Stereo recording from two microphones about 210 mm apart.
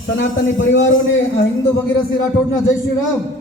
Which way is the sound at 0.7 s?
60° left (ahead or behind).